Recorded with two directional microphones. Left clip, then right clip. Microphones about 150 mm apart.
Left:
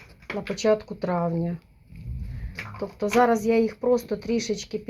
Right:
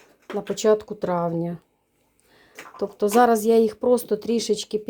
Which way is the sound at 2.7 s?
50° right (ahead or behind).